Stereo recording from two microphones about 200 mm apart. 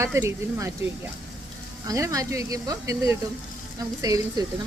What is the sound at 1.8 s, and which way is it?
Speech, 15° right (ahead or behind).